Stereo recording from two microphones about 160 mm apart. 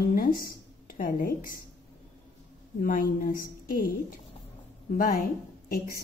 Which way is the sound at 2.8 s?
60° left (ahead or behind).